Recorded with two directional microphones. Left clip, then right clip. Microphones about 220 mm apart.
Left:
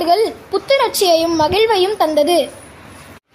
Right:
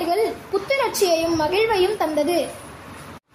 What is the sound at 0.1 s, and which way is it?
A woman's voice, 40° left (ahead or behind).